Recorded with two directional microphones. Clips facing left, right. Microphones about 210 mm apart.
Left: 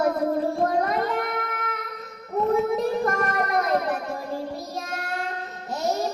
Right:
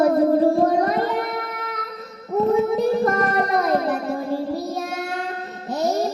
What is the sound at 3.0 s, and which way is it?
Music, 35° right (ahead or behind).